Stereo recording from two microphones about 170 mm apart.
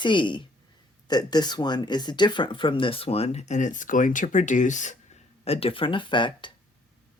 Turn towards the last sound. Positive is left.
turn(degrees=30)  # may be behind; listen again after turning